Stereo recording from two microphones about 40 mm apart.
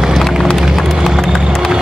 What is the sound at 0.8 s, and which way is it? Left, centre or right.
Run, centre.